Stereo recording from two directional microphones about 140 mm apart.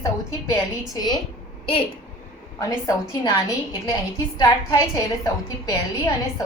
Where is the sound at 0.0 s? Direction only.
25° left (ahead or behind).